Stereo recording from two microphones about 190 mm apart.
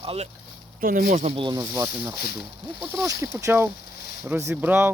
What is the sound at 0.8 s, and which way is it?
Speech, 45° right (ahead or behind).